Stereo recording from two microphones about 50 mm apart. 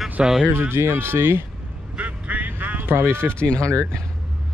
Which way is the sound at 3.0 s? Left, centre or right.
Right.